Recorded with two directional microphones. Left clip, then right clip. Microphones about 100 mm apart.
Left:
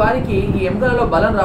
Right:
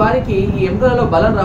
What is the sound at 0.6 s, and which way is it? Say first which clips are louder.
Speech: right 3 dB; 5° left (ahead or behind).